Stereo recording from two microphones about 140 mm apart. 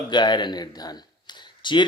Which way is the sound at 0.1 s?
30° left (ahead or behind).